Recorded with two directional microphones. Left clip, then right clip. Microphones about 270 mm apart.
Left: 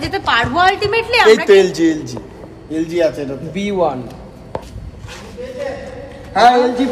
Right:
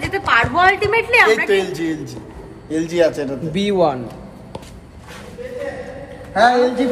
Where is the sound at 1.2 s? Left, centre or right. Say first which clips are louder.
Left 6 dB; left.